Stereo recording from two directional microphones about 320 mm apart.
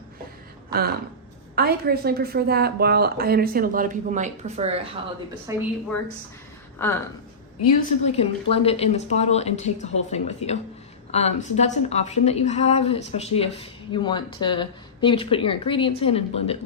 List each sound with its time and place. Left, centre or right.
1.5 s a woman's voice: right; by 5.6 s centre
6.7 s speech: centre
7.8 s a woman's voice: centre